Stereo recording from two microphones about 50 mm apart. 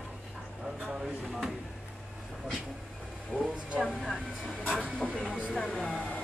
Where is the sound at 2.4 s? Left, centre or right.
Centre.